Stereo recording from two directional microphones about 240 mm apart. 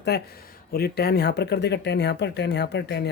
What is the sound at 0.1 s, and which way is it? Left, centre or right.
Speech, left.